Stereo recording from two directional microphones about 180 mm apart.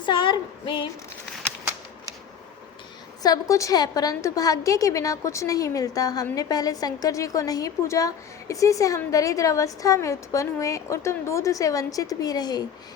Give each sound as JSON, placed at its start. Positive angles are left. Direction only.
{"t": 0.0, "sound": "female singing", "side_deg": 25}
{"t": 3.2, "sound": "a woman's voice", "side_deg": 20}